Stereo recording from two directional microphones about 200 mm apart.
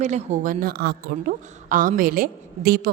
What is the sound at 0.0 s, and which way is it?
A woman's voice, 35° right (ahead or behind).